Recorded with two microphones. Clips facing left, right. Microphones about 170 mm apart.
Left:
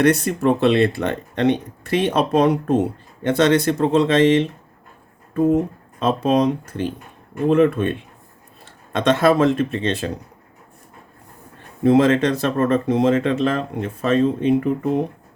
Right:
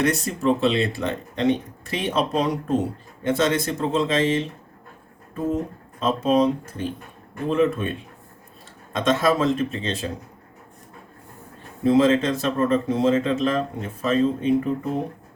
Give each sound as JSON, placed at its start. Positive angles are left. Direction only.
{"t": 0.0, "sound": "speech", "side_deg": 60}
{"t": 6.0, "sound": "speech", "side_deg": 70}
{"t": 11.8, "sound": "speech", "side_deg": 65}